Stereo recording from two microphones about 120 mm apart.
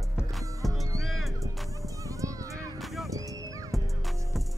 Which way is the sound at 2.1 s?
25° right (ahead or behind).